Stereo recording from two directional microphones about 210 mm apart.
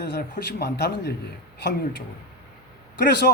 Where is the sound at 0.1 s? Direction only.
50° left (ahead or behind).